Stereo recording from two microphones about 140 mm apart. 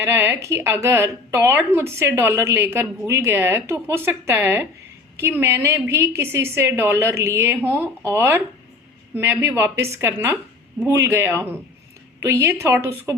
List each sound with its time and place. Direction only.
0.0 s a woman's voice: 15° right (ahead or behind)